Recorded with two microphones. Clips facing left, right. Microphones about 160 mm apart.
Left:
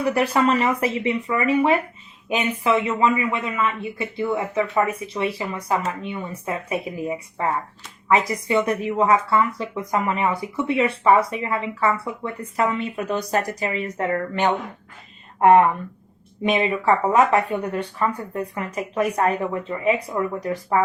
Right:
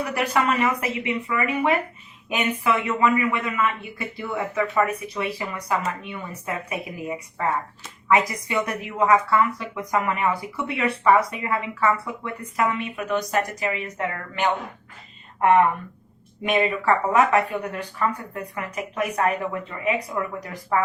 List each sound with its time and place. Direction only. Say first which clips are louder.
0.0 s speech: left 4 dB; 30° left (ahead or behind)
8.1 s speech: left 2 dB; 30° left (ahead or behind)
16.4 s speech: left 1 dB; 30° left (ahead or behind)